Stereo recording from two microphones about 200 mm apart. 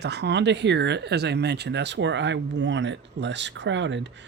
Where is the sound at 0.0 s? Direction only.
55° right (ahead or behind).